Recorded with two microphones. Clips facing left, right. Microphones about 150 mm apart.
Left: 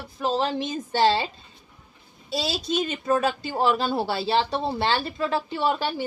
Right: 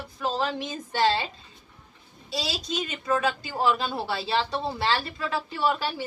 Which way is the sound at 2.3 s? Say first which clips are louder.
Left 5 dB; 25° left (ahead or behind).